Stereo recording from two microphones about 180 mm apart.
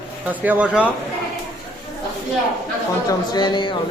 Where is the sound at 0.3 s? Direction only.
10° right (ahead or behind).